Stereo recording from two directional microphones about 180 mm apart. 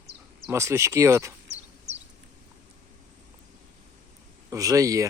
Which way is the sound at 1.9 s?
65° right (ahead or behind).